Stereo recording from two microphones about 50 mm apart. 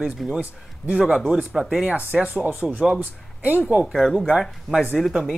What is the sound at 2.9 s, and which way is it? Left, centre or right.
Speech, right.